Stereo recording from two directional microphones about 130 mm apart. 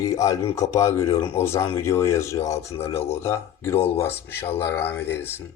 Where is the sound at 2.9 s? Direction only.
50° left (ahead or behind).